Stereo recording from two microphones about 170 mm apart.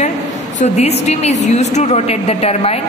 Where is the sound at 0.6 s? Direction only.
40° left (ahead or behind).